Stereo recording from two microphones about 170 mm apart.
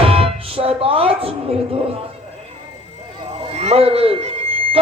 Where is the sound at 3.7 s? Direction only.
35° right (ahead or behind).